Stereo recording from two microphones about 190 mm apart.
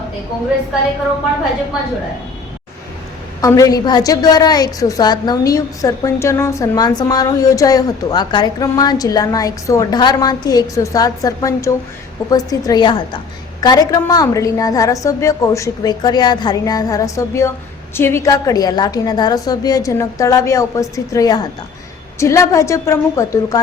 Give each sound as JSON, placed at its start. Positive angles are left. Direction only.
{"t": 3.4, "sound": "a woman's voice", "side_deg": 20}